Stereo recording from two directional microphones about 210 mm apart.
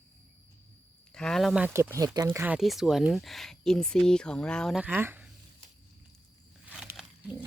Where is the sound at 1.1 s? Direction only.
5° left (ahead or behind).